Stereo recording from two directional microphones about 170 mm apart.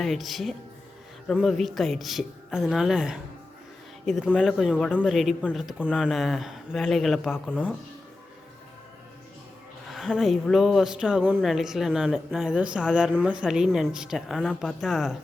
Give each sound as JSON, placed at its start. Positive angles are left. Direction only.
{"t": 0.0, "sound": "a woman's voice", "side_deg": 0}
{"t": 9.9, "sound": "a woman's voice", "side_deg": 0}